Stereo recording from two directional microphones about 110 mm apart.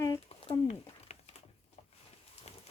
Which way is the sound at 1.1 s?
75° left (ahead or behind).